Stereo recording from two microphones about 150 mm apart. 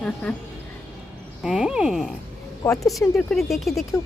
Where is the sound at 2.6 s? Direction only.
20° left (ahead or behind).